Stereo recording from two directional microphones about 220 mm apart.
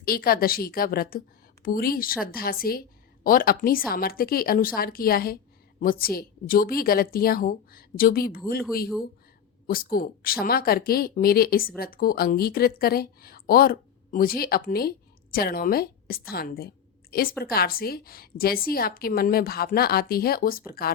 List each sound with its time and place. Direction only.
0.0 s speech: 40° left (ahead or behind)
9.6 s a woman's voice: 40° left (ahead or behind)